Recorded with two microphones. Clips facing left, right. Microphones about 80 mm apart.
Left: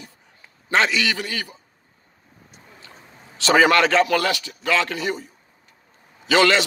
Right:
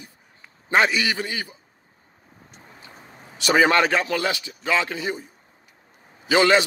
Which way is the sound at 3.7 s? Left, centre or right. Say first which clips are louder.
Left 3 dB; centre.